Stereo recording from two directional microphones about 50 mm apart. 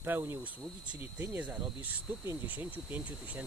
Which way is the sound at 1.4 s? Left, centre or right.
Right.